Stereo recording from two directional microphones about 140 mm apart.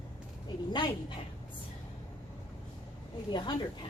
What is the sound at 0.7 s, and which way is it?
Speech, 30° left (ahead or behind).